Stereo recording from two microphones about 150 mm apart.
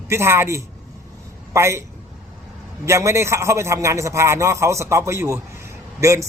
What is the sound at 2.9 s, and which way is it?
A man's voice, 20° right (ahead or behind).